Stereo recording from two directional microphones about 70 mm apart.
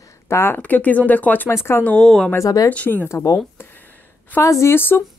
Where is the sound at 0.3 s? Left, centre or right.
Left.